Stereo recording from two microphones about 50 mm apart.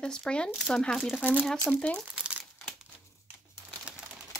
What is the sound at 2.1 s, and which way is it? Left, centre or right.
Crumpling, right.